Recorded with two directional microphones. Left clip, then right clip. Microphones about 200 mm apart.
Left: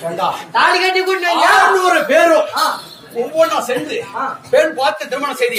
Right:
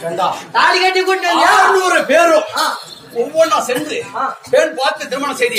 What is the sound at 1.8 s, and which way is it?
A man's voice, 15° right (ahead or behind).